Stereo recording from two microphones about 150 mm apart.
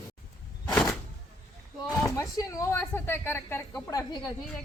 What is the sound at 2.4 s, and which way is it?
A woman's voice, 20° left (ahead or behind).